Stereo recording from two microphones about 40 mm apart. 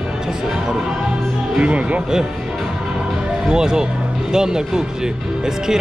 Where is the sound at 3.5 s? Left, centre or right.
Centre.